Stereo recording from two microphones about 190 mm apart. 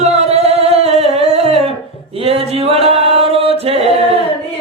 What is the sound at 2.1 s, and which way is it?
Singing, 30° right (ahead or behind).